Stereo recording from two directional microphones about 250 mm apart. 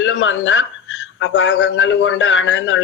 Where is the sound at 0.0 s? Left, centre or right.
Left.